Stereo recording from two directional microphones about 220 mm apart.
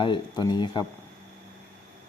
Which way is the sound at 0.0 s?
20° left (ahead or behind).